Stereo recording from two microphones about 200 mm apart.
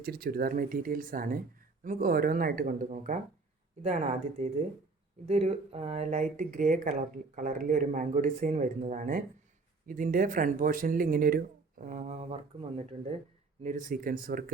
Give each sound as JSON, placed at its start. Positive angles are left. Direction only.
{"t": 0.0, "sound": "speech", "side_deg": -50}